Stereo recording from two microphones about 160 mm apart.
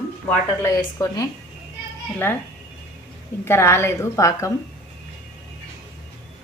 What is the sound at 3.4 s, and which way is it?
A woman's voice, 15° left (ahead or behind).